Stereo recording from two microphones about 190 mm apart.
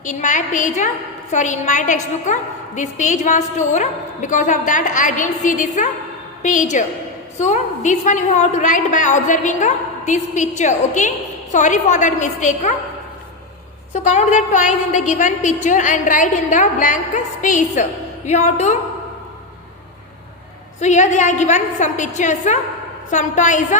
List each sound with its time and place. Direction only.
0.0 s a woman's voice: 40° left (ahead or behind)
13.9 s a woman's voice: 35° left (ahead or behind)
20.8 s a woman's voice: 40° left (ahead or behind)